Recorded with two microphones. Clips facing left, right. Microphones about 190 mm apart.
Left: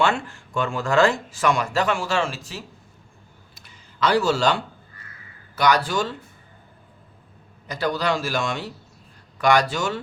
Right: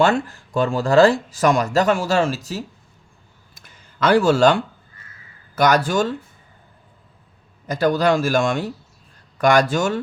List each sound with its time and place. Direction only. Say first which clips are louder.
0.0 s speech: right 5 dB; 40° right (ahead or behind)
3.5 s a sound: even; 50° right (ahead or behind)
5.5 s a man's voice: right 4 dB; 45° right (ahead or behind)
7.7 s a man's voice: right 6 dB; 45° right (ahead or behind)